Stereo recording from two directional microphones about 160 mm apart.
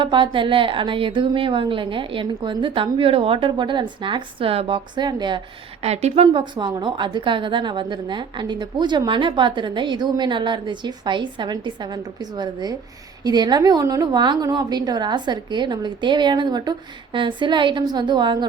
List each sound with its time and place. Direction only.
0.0 s a woman's voice: 30° right (ahead or behind)
5.8 s a woman's voice: 40° right (ahead or behind)
6.2 s a woman's voice: 30° right (ahead or behind)